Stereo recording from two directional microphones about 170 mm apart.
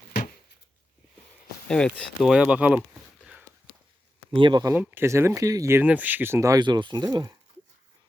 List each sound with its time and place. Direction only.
1.6 s speech: 5° left (ahead or behind)
4.3 s speech: 30° right (ahead or behind)
4.7 s speech: 10° right (ahead or behind)